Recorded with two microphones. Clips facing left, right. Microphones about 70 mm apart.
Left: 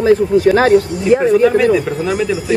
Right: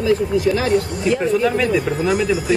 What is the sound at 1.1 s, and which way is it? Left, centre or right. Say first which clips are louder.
Speech: left 7 dB; left.